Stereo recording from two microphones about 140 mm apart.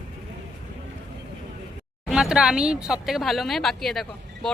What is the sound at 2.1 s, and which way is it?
Speech, 5° right (ahead or behind).